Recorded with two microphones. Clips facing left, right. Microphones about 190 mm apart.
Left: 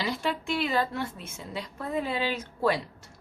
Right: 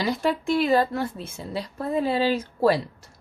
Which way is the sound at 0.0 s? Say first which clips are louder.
Right 6 dB; 40° right (ahead or behind).